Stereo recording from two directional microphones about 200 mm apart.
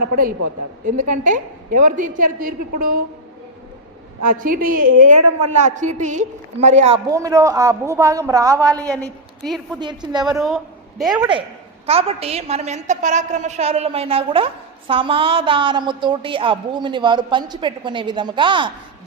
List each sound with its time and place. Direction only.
0.9 s a woman's voice: 40° right (ahead or behind)
4.4 s a woman's voice: 45° right (ahead or behind)
7.1 s a woman's voice: 15° right (ahead or behind)
10.3 s a woman's voice: centre (ahead or behind)
11.1 s a woman's voice: 20° right (ahead or behind)